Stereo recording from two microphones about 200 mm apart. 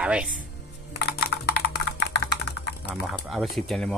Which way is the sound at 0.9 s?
55° left (ahead or behind).